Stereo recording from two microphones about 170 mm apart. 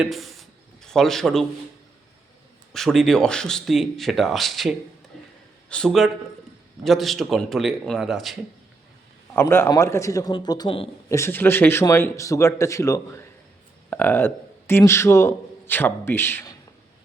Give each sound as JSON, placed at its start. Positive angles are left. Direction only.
{"t": 0.0, "sound": "a sound", "side_deg": 0}
{"t": 2.7, "sound": "speech", "side_deg": 0}
{"t": 5.1, "sound": "a sound", "side_deg": 0}
{"t": 5.6, "sound": "a man's voice", "side_deg": 5}
{"t": 9.3, "sound": "speech", "side_deg": 15}
{"t": 11.1, "sound": "a man's voice", "side_deg": 15}